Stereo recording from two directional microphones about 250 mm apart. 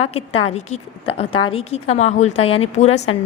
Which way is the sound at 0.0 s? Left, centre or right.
Left.